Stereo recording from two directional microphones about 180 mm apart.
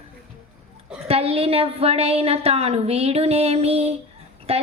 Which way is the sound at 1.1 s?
30° right (ahead or behind).